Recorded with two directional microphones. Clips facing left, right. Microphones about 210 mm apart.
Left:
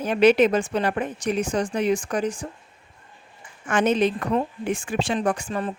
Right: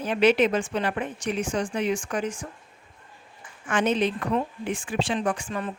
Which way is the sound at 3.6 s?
45° left (ahead or behind).